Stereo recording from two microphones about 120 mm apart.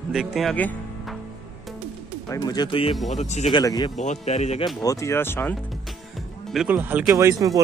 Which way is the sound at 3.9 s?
75° left (ahead or behind).